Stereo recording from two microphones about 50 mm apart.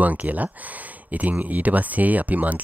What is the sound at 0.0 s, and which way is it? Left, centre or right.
Speech, right.